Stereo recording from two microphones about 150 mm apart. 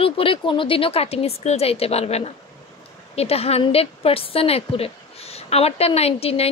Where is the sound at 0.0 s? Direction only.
35° left (ahead or behind).